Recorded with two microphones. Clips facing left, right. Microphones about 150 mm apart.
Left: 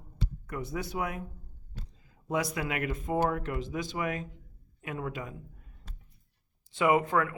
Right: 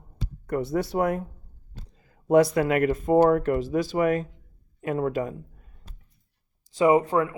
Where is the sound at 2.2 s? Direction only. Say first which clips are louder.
Right 12 dB; 55° right (ahead or behind).